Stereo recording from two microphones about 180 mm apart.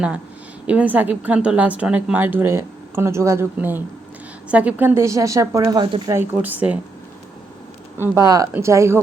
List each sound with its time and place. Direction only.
0.7 s a woman's voice: 10° right (ahead or behind)
7.9 s a woman's voice: 10° right (ahead or behind)